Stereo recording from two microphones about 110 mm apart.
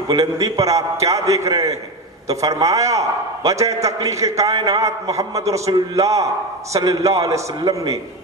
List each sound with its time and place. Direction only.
0.1 s a man's voice: 35° right (ahead or behind)